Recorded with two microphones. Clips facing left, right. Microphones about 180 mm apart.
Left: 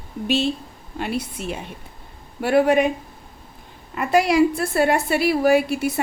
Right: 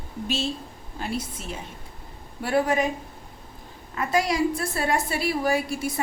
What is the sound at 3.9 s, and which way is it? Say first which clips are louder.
A woman's voice: left 7 dB; 65° left (ahead or behind).